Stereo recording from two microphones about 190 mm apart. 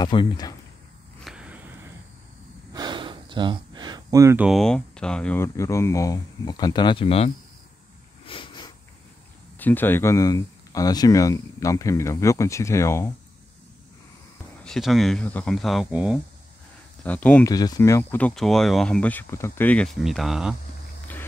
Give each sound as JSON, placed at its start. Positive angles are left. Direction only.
{"t": 0.0, "sound": "speech", "side_deg": 25}
{"t": 1.2, "sound": "a sound", "side_deg": -5}
{"t": 2.7, "sound": "gasp", "side_deg": -25}
{"t": 4.5, "sound": "speech", "side_deg": 0}
{"t": 8.3, "sound": "sniff", "side_deg": 25}
{"t": 9.6, "sound": "speech", "side_deg": 10}
{"t": 14.6, "sound": "speech", "side_deg": 0}
{"t": 17.0, "sound": "speech", "side_deg": 10}
{"t": 17.5, "sound": "speech", "side_deg": 20}